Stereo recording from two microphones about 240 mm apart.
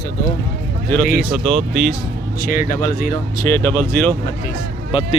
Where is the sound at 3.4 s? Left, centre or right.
Centre.